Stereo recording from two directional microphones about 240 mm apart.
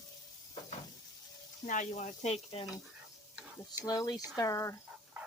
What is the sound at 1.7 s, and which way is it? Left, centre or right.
Speech, left.